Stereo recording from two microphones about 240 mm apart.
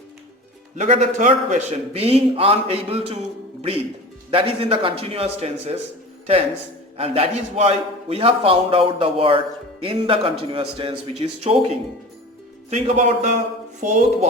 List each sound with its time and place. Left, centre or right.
0.8 s a man's voice: right
4.3 s a man's voice: right
6.9 s a man's voice: right
12.7 s a man's voice: right